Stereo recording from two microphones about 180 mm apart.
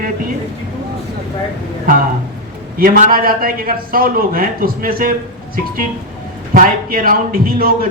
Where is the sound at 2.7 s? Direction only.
50° right (ahead or behind).